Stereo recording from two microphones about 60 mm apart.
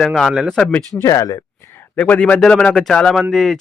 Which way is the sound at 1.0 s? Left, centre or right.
Left.